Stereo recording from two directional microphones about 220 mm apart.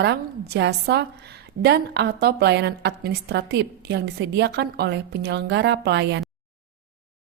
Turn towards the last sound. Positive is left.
turn(degrees=-50)  # may be behind; listen again after turning